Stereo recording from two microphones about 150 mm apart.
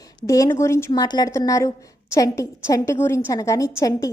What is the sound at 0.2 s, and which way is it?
A woman's voice, 20° left (ahead or behind).